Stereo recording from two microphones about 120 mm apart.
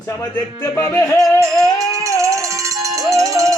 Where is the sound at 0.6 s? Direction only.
20° left (ahead or behind).